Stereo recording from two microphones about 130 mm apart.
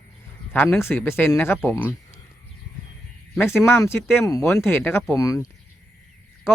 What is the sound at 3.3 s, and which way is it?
Speech, 20° left (ahead or behind).